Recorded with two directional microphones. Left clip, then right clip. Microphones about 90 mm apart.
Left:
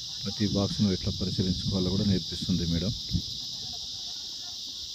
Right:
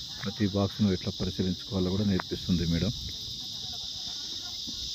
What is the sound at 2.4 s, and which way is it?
Cricket, centre (ahead or behind).